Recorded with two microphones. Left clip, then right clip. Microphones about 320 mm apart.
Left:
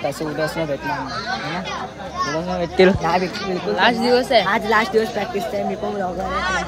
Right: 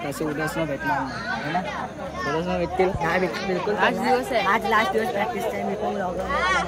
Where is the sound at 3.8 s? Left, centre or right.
Left.